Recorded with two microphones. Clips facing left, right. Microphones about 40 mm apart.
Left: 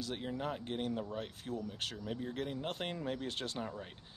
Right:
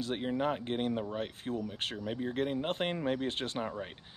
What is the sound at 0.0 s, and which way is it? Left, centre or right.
Speech, right.